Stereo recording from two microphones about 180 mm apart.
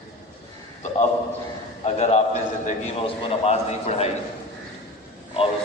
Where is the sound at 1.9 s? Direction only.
35° left (ahead or behind).